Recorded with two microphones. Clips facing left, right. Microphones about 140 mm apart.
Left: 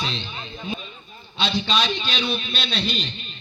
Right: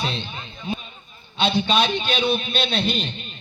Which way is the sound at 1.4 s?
55° right (ahead or behind).